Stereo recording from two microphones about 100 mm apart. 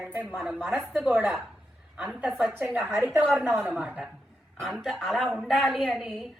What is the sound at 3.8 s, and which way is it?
Speech, 10° right (ahead or behind).